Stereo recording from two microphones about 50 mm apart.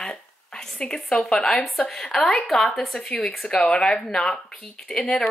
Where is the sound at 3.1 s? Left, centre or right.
Left.